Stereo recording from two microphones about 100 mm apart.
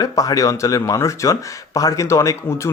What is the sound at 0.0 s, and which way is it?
Speech, 40° left (ahead or behind).